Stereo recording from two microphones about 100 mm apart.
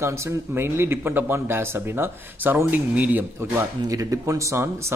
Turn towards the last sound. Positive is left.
turn(degrees=-30)  # may be behind; listen again after turning